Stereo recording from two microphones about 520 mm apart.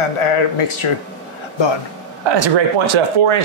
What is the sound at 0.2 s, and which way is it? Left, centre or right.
Speech, left.